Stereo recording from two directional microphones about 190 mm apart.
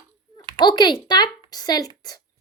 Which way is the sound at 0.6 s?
25° left (ahead or behind).